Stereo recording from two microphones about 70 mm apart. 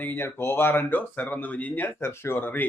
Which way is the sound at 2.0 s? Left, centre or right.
Left.